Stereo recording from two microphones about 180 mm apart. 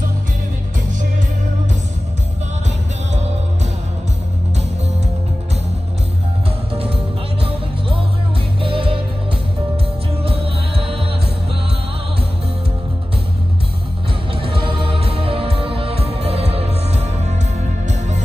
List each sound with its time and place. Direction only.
6.7 s music: 30° right (ahead or behind)
8.6 s music: 30° right (ahead or behind)
10.2 s music: 30° right (ahead or behind)
14.3 s music: 30° right (ahead or behind)